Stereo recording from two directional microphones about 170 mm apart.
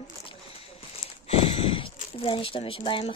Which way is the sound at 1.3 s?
35° left (ahead or behind).